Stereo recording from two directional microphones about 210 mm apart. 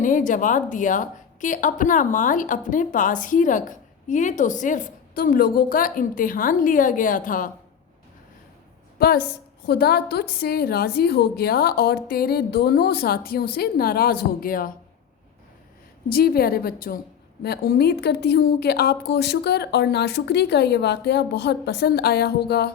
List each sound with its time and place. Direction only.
0.0 s a woman's voice: 35° left (ahead or behind)
9.0 s a woman's voice: 45° left (ahead or behind)
16.0 s speech: 45° left (ahead or behind)